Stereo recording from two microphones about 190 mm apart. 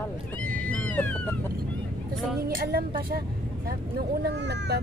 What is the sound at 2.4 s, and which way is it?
Speech, 50° right (ahead or behind).